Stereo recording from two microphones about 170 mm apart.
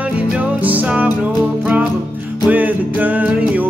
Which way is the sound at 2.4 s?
10° right (ahead or behind).